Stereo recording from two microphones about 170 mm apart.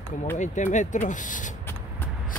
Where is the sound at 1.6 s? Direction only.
15° left (ahead or behind).